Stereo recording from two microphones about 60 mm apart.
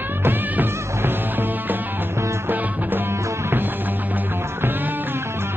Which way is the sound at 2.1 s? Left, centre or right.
Right.